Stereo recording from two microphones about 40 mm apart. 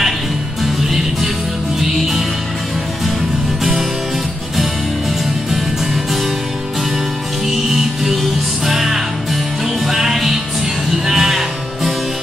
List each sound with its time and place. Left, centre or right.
0.8 s music: centre
7.4 s music: centre